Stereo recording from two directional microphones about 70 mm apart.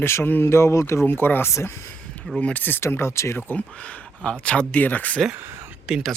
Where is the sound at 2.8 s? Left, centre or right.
Left.